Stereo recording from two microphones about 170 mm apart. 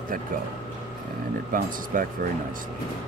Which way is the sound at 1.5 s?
55° right (ahead or behind).